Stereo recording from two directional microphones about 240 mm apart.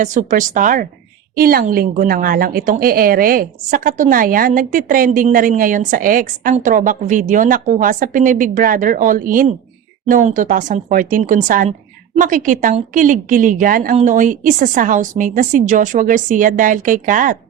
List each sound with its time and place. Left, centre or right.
0.0 s a woman's voice: right